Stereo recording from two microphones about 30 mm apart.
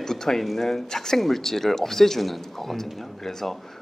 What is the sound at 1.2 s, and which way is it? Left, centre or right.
A man's voice, centre.